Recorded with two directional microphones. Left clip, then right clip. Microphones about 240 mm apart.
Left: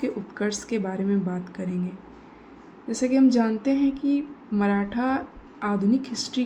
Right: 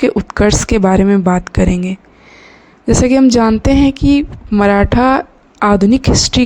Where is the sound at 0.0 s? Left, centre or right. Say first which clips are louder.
Right 16 dB; right.